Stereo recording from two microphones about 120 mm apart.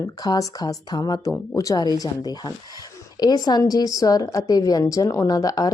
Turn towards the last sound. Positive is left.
turn(degrees=30)  # may be behind; listen again after turning